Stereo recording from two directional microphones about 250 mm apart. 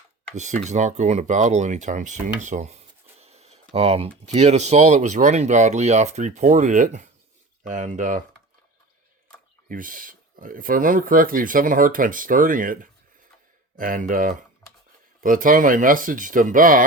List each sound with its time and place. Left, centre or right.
0.3 s speech: right
9.6 s speech: right